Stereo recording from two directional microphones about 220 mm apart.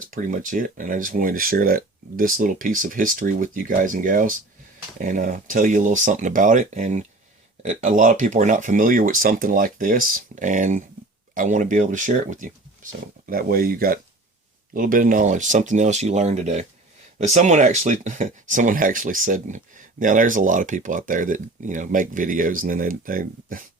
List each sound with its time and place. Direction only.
0.1 s speech: 35° right (ahead or behind)